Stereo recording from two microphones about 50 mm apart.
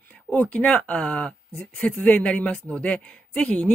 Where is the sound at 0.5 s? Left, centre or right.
Left.